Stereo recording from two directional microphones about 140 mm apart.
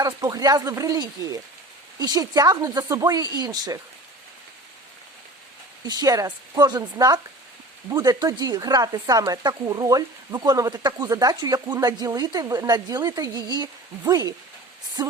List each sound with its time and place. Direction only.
0.0 s speech: 25° right (ahead or behind)
5.8 s speech: 30° right (ahead or behind)
15.0 s a sound: 30° right (ahead or behind)